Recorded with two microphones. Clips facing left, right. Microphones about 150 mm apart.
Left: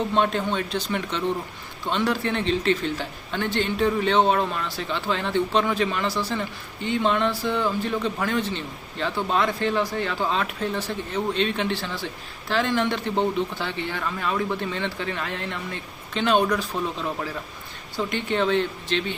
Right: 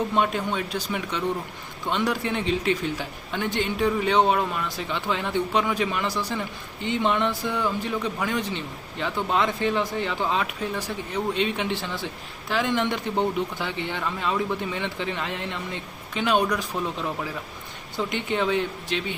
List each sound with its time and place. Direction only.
0.1 s a man's voice: 10° right (ahead or behind)
17.9 s a man's voice: 15° right (ahead or behind)